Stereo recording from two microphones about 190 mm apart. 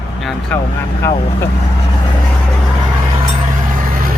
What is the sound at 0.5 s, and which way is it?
Speech, 10° left (ahead or behind).